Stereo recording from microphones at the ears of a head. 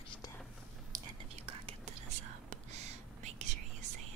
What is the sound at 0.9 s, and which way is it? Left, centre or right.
Whispering, right.